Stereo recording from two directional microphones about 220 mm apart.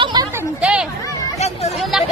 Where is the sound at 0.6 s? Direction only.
5° right (ahead or behind).